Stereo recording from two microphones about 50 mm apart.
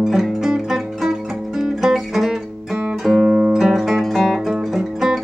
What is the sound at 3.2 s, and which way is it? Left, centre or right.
Music, centre.